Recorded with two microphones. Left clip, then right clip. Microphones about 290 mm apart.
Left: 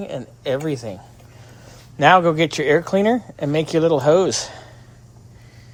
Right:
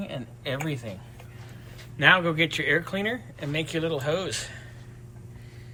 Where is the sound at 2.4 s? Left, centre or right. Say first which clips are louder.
Left 7 dB; centre.